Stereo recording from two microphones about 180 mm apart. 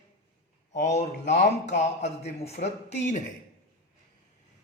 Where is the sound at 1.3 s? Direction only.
40° left (ahead or behind).